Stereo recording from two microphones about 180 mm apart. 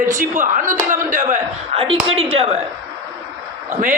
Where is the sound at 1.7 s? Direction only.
30° right (ahead or behind).